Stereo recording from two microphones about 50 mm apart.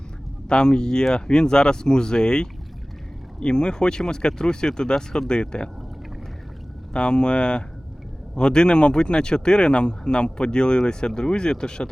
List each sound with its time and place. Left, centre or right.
0.4 s speech: centre
6.9 s speech: centre